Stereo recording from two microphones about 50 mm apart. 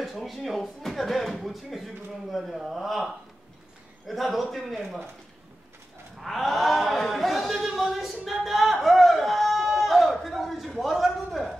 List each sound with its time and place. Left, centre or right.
0.2 s a man's voice: centre
4.1 s a man's voice: centre
6.2 s a man's voice: centre
8.8 s a sound: centre